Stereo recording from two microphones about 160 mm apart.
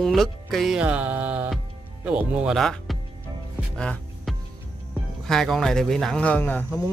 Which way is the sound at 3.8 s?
5° left (ahead or behind).